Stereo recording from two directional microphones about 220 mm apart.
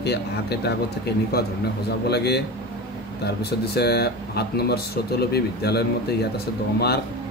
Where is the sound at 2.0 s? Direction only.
50° left (ahead or behind).